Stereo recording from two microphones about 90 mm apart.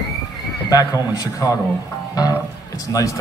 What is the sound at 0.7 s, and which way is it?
Speech, 45° left (ahead or behind).